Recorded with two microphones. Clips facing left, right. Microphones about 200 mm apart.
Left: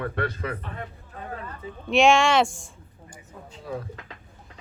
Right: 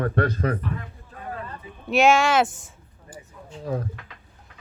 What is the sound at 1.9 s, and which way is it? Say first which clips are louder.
Speech: even; 5° right (ahead or behind).